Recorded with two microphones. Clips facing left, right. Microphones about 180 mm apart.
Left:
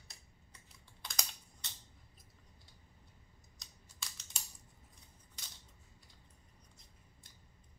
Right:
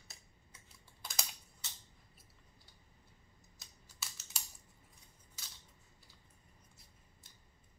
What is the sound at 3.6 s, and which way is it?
Scissors, 5° right (ahead or behind).